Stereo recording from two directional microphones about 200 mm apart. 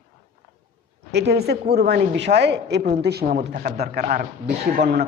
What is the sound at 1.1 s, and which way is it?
A woman's voice, 55° right (ahead or behind).